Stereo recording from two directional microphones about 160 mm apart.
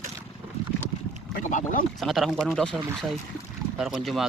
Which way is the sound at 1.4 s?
55° left (ahead or behind).